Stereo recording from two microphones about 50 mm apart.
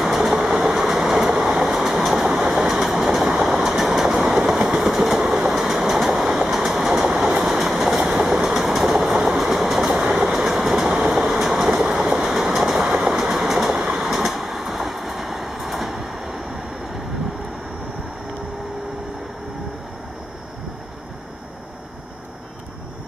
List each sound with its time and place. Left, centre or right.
0.0 s train: centre